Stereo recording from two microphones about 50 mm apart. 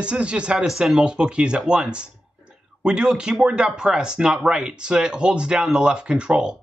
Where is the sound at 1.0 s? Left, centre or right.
Right.